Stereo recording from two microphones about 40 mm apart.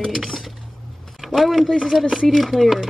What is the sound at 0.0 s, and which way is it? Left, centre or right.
Dishes, centre.